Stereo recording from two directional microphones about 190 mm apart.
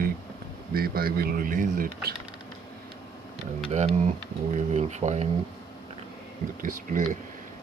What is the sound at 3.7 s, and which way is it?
Speech, 35° right (ahead or behind).